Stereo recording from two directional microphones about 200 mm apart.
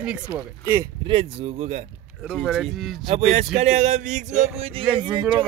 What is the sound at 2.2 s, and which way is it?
Speech, 5° right (ahead or behind).